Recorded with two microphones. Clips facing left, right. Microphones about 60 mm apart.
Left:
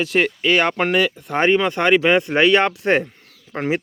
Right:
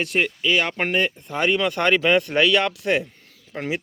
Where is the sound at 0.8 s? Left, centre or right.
Left.